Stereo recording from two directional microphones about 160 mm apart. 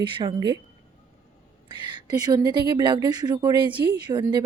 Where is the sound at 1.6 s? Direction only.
30° right (ahead or behind).